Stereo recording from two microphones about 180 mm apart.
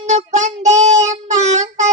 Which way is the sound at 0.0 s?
40° right (ahead or behind).